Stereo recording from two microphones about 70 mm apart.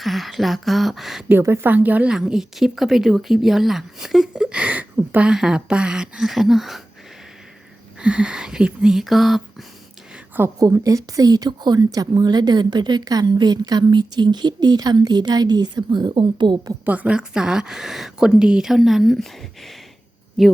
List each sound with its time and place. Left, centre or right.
0.0 s a woman's voice: centre
1.4 s a woman's voice: right
1.6 s a woman's voice: right
2.0 s a woman's voice: centre
5.3 s speech: centre
8.0 s speech: centre
10.6 s a woman's voice: right
16.8 s a woman's voice: right
17.2 s a woman's voice: centre